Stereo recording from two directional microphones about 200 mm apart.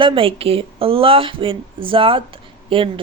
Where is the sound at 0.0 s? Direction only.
25° right (ahead or behind).